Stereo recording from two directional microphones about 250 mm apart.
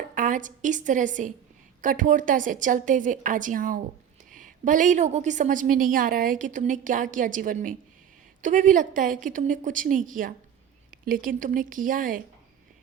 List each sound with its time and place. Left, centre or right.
0.1 s a woman's voice: right